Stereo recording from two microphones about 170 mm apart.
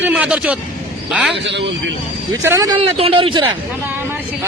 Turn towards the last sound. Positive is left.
turn(degrees=-30)  # may be behind; listen again after turning